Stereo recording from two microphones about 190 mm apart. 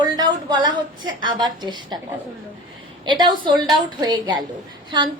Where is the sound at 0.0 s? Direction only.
20° right (ahead or behind).